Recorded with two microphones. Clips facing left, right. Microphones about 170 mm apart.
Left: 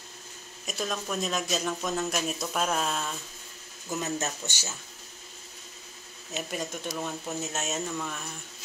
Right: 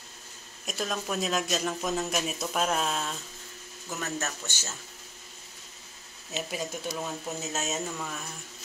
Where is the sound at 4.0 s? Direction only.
15° left (ahead or behind).